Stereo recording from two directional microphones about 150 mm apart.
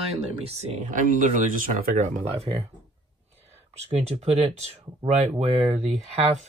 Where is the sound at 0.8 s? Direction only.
60° right (ahead or behind); by 2.7 s 45° right (ahead or behind).